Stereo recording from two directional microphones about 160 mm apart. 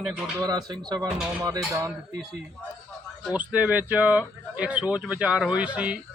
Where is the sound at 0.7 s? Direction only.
25° right (ahead or behind).